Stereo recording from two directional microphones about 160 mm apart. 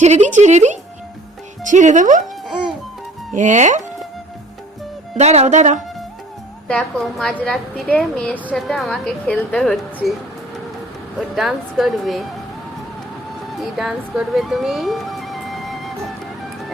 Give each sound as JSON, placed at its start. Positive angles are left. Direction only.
{"t": 0.0, "sound": "speech", "side_deg": -45}
{"t": 3.3, "sound": "speech", "side_deg": -50}
{"t": 5.1, "sound": "speech", "side_deg": -45}
{"t": 6.7, "sound": "a woman's voice", "side_deg": 5}
{"t": 11.2, "sound": "a woman's voice", "side_deg": 0}
{"t": 13.6, "sound": "speech", "side_deg": 0}